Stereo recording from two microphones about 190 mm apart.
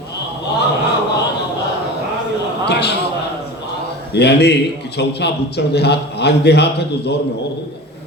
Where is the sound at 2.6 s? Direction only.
60° left (ahead or behind).